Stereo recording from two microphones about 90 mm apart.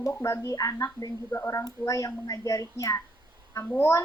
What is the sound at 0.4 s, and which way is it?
A woman's voice, 40° left (ahead or behind).